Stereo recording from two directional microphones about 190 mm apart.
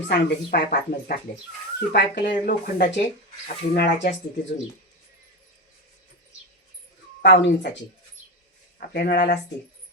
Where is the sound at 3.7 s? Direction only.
60° left (ahead or behind).